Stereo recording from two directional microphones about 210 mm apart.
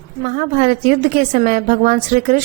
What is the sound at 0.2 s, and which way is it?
Speech, 40° right (ahead or behind).